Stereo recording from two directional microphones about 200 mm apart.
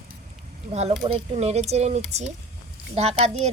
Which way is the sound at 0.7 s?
35° right (ahead or behind).